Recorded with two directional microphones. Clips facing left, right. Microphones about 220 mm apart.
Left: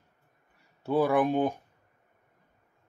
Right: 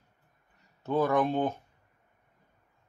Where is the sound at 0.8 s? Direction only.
15° left (ahead or behind).